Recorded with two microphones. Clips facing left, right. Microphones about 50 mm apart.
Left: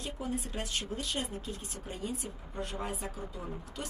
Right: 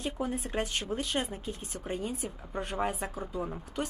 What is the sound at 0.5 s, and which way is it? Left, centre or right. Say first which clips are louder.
Speech: right 5 dB; right.